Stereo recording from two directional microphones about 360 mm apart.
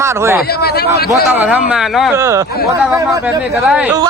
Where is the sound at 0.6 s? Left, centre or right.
Left.